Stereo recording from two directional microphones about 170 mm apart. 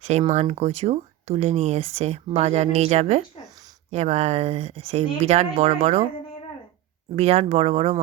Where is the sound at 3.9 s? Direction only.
40° right (ahead or behind).